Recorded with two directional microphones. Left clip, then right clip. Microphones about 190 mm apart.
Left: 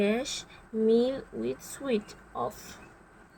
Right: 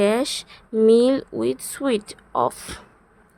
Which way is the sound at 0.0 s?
45° right (ahead or behind).